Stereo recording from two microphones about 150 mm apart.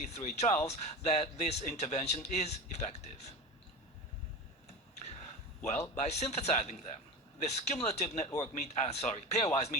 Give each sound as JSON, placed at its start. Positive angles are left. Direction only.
{"t": 0.0, "sound": "speech", "side_deg": 50}
{"t": 6.0, "sound": "speech", "side_deg": 50}